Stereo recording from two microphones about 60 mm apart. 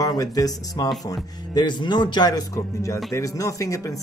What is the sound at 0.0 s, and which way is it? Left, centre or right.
Speech, left.